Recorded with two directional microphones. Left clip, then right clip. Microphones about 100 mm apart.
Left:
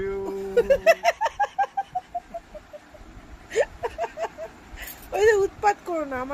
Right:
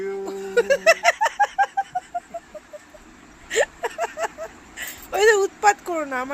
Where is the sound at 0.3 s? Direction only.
20° left (ahead or behind).